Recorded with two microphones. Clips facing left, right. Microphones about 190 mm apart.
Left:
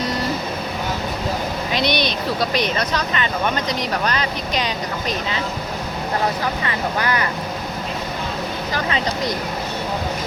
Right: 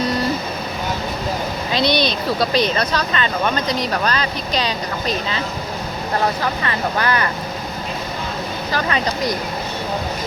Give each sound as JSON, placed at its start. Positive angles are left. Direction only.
{"t": 1.7, "sound": "speech", "side_deg": 20}
{"t": 6.7, "sound": "speech", "side_deg": 15}
{"t": 8.7, "sound": "speech", "side_deg": 20}